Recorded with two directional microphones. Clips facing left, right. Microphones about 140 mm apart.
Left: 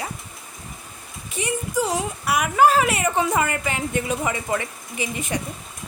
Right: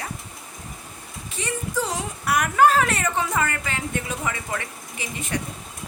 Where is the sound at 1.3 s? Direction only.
15° left (ahead or behind).